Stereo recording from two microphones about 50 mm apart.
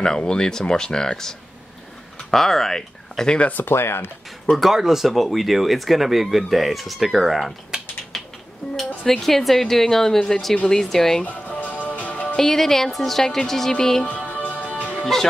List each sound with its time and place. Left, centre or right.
0.2 s speech: centre
2.3 s speech: centre
3.3 s speech: left
3.6 s speech: left
4.5 s speech: centre
8.1 s music: centre
8.7 s speech: centre
11.2 s music: left
12.4 s speech: centre
14.0 s music: left